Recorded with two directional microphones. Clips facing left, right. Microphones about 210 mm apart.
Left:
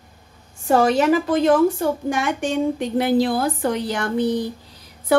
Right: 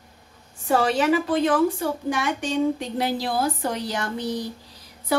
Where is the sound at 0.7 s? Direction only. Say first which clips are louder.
Left 4 dB; 45° left (ahead or behind).